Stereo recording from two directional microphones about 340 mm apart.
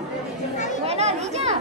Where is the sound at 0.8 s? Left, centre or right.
Centre.